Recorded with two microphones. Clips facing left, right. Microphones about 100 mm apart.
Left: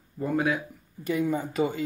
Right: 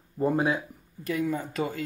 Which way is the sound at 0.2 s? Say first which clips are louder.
Right 1 dB; 25° right (ahead or behind).